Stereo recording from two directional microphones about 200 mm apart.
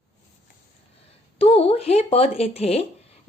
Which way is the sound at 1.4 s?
30° left (ahead or behind).